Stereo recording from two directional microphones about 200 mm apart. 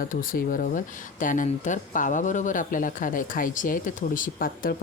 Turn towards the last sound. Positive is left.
turn(degrees=45)  # may be behind; listen again after turning